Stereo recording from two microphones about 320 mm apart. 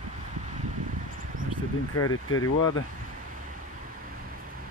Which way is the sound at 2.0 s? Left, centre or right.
Left.